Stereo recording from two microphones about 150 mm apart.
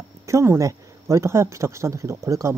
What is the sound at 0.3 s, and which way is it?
Speech, 20° right (ahead or behind).